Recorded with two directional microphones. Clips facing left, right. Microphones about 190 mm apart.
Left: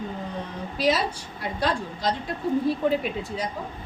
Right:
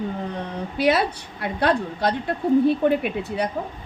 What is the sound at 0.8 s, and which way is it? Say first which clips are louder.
A woman's voice: right 3 dB; 60° right (ahead or behind).